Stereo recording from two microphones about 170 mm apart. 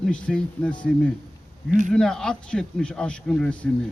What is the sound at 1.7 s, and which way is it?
Speech, 45° right (ahead or behind).